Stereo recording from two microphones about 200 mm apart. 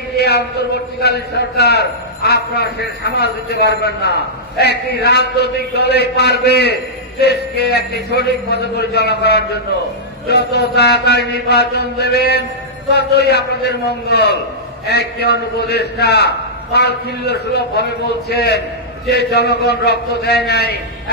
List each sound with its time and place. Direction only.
0.2 s a man's voice: 55° left (ahead or behind)